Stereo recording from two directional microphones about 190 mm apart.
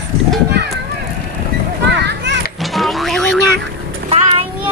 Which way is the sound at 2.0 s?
65° right (ahead or behind).